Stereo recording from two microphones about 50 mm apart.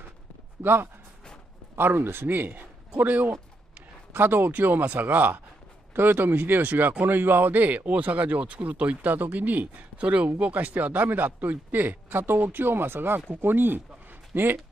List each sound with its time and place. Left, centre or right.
0.6 s a man's voice: right